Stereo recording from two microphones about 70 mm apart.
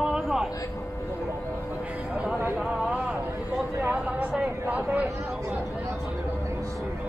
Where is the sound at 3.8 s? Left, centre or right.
Right.